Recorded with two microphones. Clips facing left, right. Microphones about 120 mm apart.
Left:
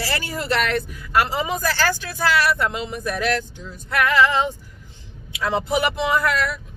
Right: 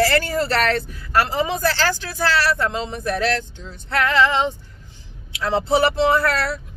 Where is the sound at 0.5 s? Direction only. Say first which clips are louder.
Right 2 dB; 35° right (ahead or behind).